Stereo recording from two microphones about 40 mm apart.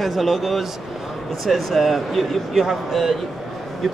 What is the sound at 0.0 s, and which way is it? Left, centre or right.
Speech, centre.